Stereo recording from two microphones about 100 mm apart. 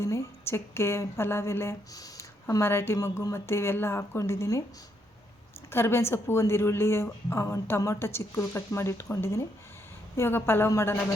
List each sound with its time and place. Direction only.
0.0 s a woman's voice: 30° left (ahead or behind)
5.7 s a woman's voice: 25° left (ahead or behind)